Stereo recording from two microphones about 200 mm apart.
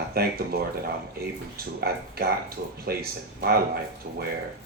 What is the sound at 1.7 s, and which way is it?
Speech, 50° right (ahead or behind).